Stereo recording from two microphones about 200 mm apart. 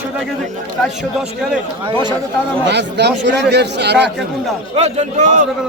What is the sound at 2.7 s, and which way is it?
Speech, 60° right (ahead or behind).